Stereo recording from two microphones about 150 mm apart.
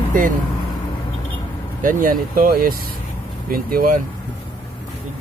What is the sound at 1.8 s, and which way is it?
Speech, 65° right (ahead or behind).